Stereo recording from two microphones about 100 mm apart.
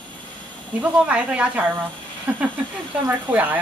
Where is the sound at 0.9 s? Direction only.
10° right (ahead or behind).